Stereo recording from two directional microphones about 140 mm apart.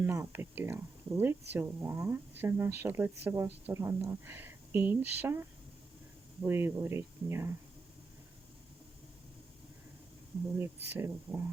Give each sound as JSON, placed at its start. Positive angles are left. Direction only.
{"t": 0.0, "sound": "speech", "side_deg": -20}
{"t": 10.8, "sound": "speech", "side_deg": -15}